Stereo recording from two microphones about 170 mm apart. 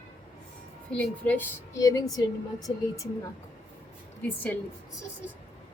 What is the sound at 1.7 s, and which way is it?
A woman's voice, 20° left (ahead or behind).